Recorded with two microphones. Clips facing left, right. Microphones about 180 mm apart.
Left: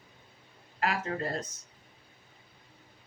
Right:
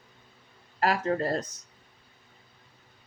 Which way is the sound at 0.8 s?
35° right (ahead or behind).